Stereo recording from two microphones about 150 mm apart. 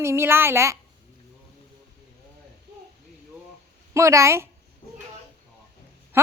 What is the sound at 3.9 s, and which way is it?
Speech, 20° right (ahead or behind).